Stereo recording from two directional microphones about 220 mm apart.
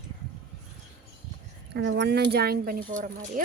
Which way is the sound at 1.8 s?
55° right (ahead or behind).